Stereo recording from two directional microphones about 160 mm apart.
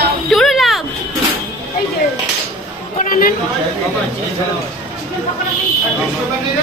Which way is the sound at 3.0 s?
65° left (ahead or behind).